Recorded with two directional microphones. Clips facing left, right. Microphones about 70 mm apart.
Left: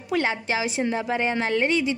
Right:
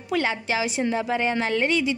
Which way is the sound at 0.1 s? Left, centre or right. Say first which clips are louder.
Even; left.